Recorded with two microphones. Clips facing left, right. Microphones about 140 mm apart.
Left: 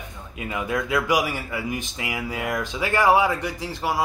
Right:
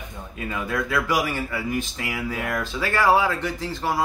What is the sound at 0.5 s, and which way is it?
Speech, 15° left (ahead or behind).